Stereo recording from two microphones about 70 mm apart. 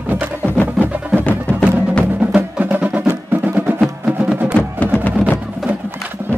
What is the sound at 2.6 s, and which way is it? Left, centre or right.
Music, right.